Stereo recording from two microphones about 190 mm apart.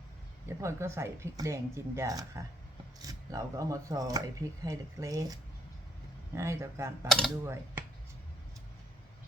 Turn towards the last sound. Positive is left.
turn(degrees=-15)  # may be behind; listen again after turning